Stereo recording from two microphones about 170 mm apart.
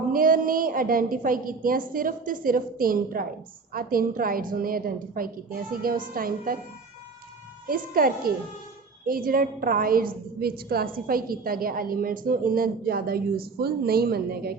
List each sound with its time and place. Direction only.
0.1 s a woman's voice: 55° right (ahead or behind)
7.7 s a woman's voice: 60° right (ahead or behind)